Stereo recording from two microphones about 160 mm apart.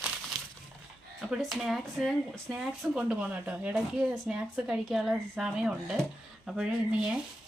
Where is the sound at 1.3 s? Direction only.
5° right (ahead or behind).